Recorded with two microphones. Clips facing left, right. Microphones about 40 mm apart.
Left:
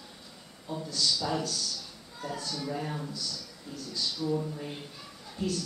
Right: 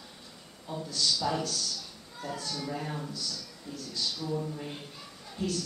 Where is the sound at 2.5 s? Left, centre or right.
Centre.